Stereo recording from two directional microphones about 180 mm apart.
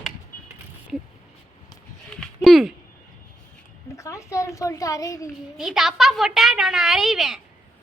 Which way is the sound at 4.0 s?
15° left (ahead or behind).